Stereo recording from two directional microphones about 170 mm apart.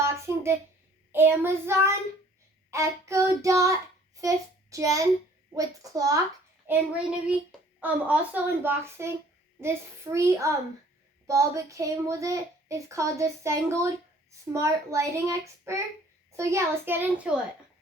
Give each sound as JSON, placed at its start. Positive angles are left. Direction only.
{"t": 0.0, "sound": "a sound", "side_deg": -15}
{"t": 1.1, "sound": "a child's voice", "side_deg": -10}
{"t": 6.7, "sound": "a child's voice", "side_deg": -5}